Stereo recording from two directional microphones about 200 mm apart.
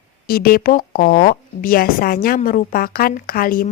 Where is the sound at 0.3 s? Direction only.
50° left (ahead or behind).